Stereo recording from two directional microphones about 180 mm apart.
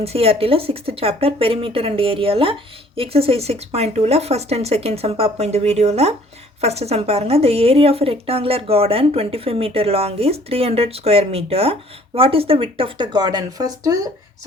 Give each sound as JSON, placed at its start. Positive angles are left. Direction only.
{"t": 0.0, "sound": "speech", "side_deg": -35}